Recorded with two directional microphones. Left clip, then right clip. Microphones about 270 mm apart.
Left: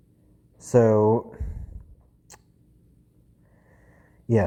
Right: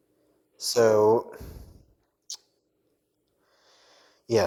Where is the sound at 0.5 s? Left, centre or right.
Right.